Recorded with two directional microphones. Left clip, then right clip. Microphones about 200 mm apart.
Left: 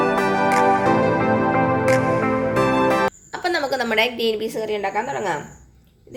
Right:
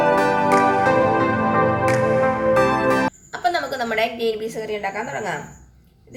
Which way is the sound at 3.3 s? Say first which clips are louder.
Even; 40° left (ahead or behind).